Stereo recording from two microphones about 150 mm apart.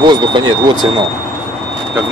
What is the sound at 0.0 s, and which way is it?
Speech, 30° right (ahead or behind).